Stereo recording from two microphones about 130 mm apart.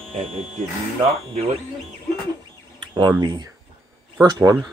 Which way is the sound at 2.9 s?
30° right (ahead or behind).